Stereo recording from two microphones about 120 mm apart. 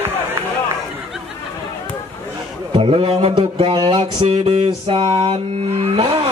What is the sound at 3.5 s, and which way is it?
Speech, 40° right (ahead or behind).